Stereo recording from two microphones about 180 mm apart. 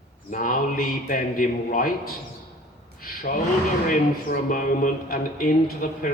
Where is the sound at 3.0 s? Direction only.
50° left (ahead or behind).